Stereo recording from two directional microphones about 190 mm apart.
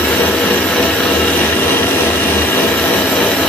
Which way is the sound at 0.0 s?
5° left (ahead or behind).